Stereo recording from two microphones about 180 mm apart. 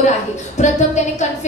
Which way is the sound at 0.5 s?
40° left (ahead or behind).